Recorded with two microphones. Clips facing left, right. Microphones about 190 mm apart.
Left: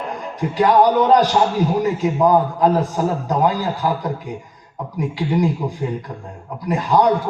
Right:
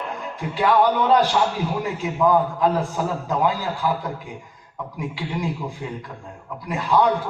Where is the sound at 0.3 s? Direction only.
40° left (ahead or behind).